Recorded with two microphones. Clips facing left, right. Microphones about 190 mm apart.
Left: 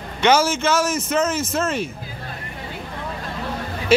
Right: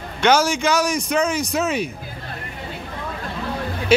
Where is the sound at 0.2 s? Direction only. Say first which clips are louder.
Even; 5° left (ahead or behind).